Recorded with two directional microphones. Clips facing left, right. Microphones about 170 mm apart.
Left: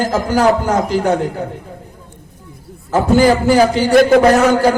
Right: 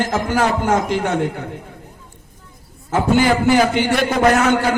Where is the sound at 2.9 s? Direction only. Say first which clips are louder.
Left 4 dB; 35° left (ahead or behind).